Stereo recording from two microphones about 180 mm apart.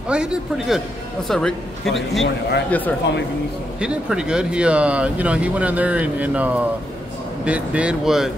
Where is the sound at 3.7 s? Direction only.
5° right (ahead or behind).